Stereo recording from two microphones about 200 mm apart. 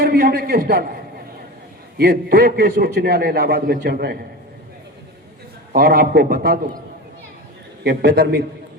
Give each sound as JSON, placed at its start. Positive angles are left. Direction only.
{"t": 0.0, "sound": "a man's voice", "side_deg": -50}
{"t": 2.0, "sound": "a man's voice", "side_deg": -50}
{"t": 5.7, "sound": "a man's voice", "side_deg": -50}
{"t": 7.9, "sound": "a man's voice", "side_deg": -55}